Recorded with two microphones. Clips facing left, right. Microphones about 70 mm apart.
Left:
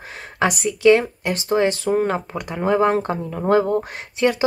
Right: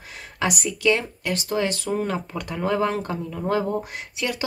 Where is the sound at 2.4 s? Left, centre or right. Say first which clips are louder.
Left 5 dB; left.